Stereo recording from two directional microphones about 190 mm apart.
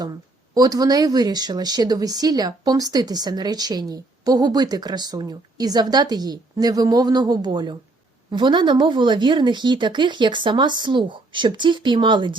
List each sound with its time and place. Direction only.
0.5 s speech: 20° right (ahead or behind)